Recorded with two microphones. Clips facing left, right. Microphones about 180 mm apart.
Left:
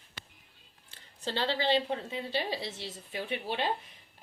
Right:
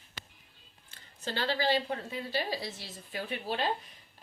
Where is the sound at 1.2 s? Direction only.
25° left (ahead or behind).